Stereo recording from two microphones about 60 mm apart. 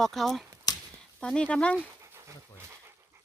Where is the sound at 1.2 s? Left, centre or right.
Centre.